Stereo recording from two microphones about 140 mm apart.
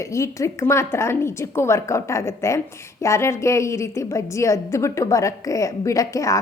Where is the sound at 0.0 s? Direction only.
20° left (ahead or behind).